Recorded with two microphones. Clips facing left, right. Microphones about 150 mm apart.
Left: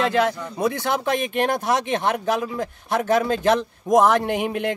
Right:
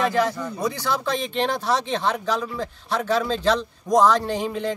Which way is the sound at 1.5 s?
55° left (ahead or behind).